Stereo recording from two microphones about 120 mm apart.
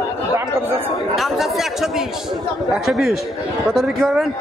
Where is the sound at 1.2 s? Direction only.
Centre (ahead or behind).